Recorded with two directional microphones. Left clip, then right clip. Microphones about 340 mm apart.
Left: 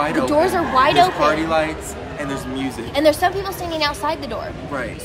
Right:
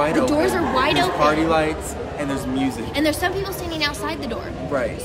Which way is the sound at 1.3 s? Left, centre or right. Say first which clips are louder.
Even; centre.